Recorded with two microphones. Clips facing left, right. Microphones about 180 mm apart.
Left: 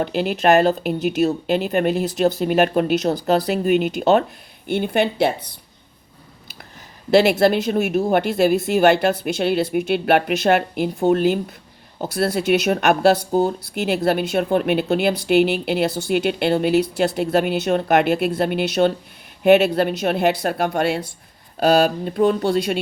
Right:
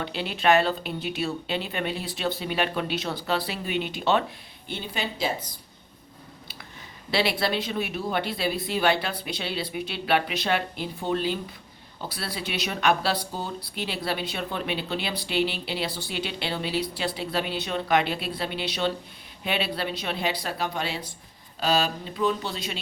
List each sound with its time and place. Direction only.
0.0 s speech: 45° left (ahead or behind)
4.7 s speech: 60° left (ahead or behind)
7.1 s speech: 45° left (ahead or behind)